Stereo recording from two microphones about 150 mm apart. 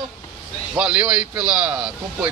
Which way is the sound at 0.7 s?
5° right (ahead or behind).